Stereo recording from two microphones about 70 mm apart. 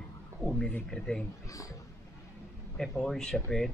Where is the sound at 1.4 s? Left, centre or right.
Left.